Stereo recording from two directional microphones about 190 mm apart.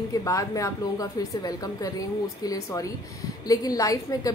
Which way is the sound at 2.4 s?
20° left (ahead or behind).